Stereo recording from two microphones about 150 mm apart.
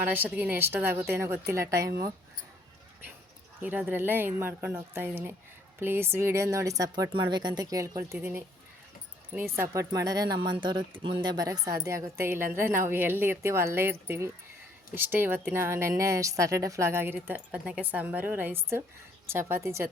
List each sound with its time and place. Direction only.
0.0 s speech: 15° right (ahead or behind)
3.6 s speech: 10° right (ahead or behind)